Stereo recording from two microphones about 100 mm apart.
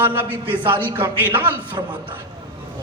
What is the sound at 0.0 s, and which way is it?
A man's voice, 20° right (ahead or behind).